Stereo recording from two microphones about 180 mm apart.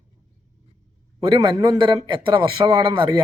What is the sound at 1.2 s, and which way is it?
A man's voice, 20° right (ahead or behind).